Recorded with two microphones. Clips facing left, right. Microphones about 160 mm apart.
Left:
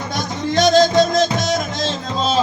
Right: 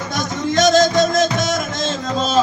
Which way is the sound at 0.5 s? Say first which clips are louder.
Left 1 dB; 45° right (ahead or behind).